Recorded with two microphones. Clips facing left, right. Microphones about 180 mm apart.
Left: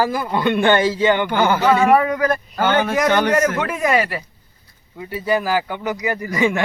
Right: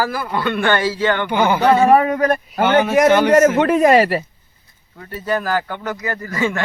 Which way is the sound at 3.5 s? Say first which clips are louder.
Right 7 dB; 35° right (ahead or behind).